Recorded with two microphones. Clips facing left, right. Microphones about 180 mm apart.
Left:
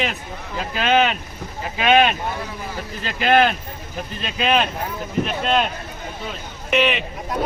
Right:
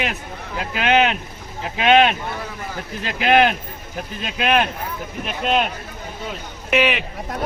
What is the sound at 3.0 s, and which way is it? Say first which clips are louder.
Speech: right 1 dB; 10° right (ahead or behind).